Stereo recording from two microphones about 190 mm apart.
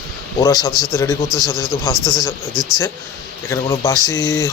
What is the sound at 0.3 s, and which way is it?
Speech, 15° left (ahead or behind).